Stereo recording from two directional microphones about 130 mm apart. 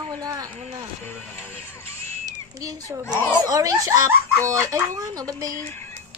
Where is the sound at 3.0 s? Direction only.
15° left (ahead or behind).